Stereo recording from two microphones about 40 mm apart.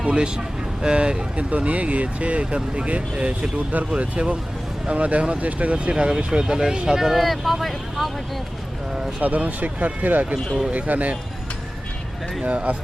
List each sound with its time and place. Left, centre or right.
0.0 s speech: right
1.5 s speech: right; by 8.1 s centre
9.2 s speech: right
12.5 s speech: right